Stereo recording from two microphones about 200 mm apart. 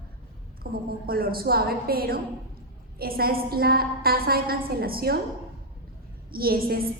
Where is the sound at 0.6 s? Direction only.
50° right (ahead or behind).